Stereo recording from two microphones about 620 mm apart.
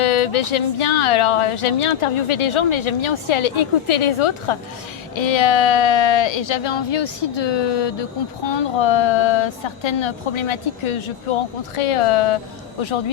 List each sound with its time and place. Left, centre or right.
0.0 s speech: left